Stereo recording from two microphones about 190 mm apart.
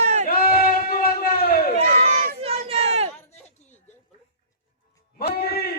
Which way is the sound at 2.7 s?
35° right (ahead or behind).